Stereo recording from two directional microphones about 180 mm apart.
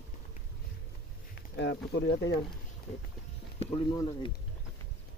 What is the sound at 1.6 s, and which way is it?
Speech, 75° left (ahead or behind).